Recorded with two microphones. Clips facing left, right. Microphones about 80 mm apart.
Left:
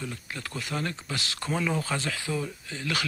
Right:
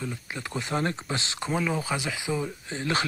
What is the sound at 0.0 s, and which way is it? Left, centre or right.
Speech, centre.